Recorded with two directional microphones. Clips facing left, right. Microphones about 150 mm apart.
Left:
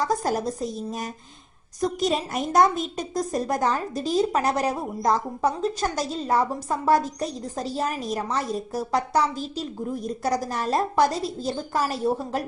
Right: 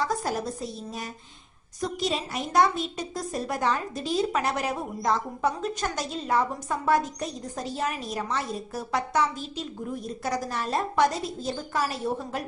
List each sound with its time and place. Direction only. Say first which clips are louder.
0.0 s a woman's voice: left 4 dB; 40° left (ahead or behind)